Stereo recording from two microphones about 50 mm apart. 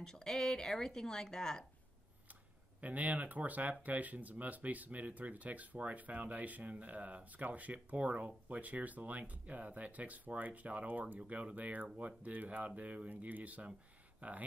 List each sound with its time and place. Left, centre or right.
0.0 s speech: centre
2.8 s speech: right